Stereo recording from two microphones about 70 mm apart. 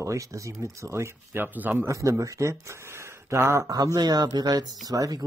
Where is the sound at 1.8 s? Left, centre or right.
Right.